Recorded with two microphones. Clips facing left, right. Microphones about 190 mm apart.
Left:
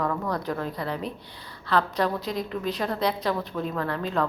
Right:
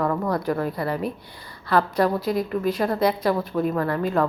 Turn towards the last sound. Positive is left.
turn(degrees=-10)  # may be behind; listen again after turning